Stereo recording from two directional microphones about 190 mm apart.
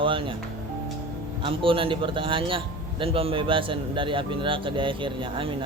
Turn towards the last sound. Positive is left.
turn(degrees=-25)  # may be behind; listen again after turning